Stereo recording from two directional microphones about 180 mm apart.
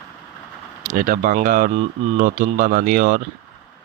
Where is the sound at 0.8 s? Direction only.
50° right (ahead or behind).